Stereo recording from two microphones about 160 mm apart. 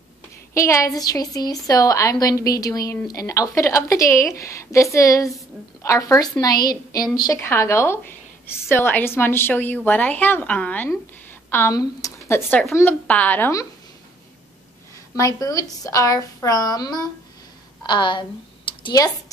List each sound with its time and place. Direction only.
0.6 s a woman's voice: 20° left (ahead or behind)
15.1 s a woman's voice: 20° left (ahead or behind)